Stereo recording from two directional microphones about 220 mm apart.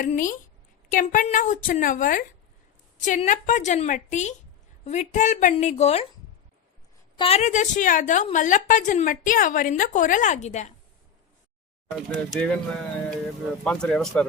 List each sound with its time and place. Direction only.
0.0 s a woman's voice: 35° left (ahead or behind)
7.2 s a woman's voice: 30° left (ahead or behind)
11.9 s speech: 5° left (ahead or behind)
13.7 s speech: 5° left (ahead or behind)